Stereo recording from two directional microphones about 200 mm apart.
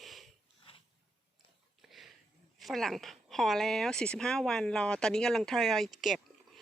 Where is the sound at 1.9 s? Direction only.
Centre (ahead or behind).